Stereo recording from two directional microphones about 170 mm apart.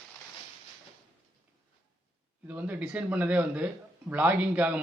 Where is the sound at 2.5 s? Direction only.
10° right (ahead or behind).